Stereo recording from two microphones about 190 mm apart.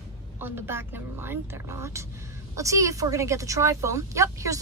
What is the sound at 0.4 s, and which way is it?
A woman's voice, 10° right (ahead or behind).